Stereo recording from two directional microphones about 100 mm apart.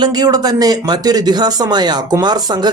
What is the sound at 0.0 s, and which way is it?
Speech, 40° right (ahead or behind).